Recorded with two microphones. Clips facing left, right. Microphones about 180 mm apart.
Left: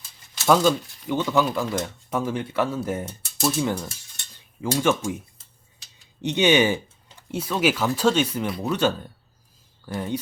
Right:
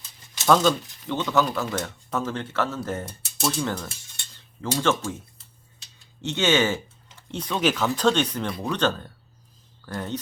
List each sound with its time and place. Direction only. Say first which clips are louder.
0.4 s speech: left 1 dB; 10° left (ahead or behind)
3.3 s speech: left 3 dB; centre (ahead or behind)
4.4 s speech: left 3 dB; 10° left (ahead or behind)
6.2 s speech: left 3 dB; 15° left (ahead or behind)